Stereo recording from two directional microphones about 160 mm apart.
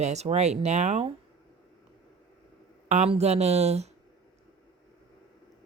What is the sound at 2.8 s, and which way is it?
A man's voice, 45° right (ahead or behind).